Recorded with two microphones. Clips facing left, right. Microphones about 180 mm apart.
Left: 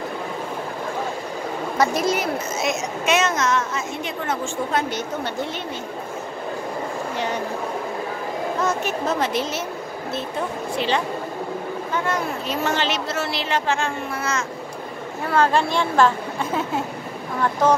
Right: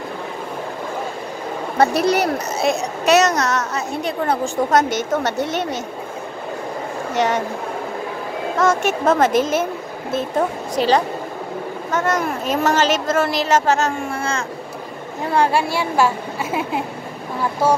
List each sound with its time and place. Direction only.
1.8 s a woman's voice: 65° right (ahead or behind)
2.3 s a woman's voice: 35° right (ahead or behind)
5.1 s speech: 80° right
7.2 s a woman's voice: 90° right
8.5 s a woman's voice: 90° right
9.1 s speech: 45° right (ahead or behind)
10.8 s a woman's voice: 40° right (ahead or behind)
15.2 s a child's voice: 15° right (ahead or behind)